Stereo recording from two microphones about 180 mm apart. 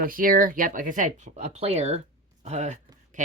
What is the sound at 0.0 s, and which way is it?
Speech, 50° right (ahead or behind).